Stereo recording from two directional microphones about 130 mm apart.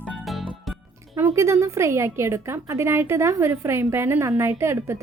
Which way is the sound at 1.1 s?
20° right (ahead or behind).